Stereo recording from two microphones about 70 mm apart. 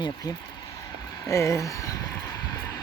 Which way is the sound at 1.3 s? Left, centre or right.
Left.